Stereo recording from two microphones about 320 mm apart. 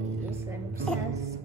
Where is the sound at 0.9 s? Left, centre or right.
Centre.